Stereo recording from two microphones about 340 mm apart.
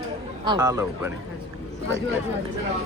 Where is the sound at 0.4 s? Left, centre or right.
Centre.